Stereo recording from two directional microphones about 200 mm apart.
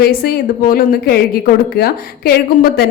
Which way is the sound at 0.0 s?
50° left (ahead or behind).